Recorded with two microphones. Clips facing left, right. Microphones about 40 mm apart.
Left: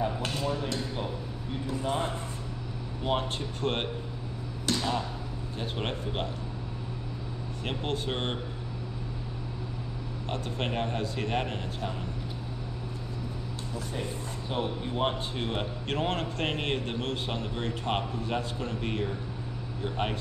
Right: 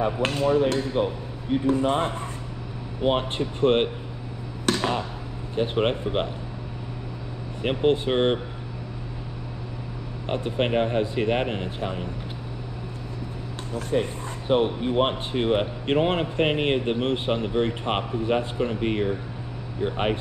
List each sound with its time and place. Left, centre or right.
0.0 s speech: right
3.0 s speech: right
4.6 s a sound: right
5.6 s speech: right
7.6 s speech: right
10.3 s speech: right
13.7 s speech: right